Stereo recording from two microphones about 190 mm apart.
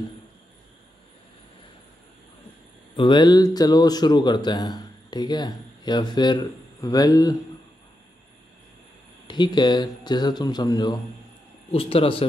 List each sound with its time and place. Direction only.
3.0 s speech: 25° left (ahead or behind)
9.3 s speech: 25° left (ahead or behind)